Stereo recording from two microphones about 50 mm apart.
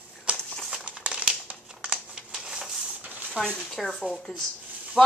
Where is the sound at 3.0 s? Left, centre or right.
Right.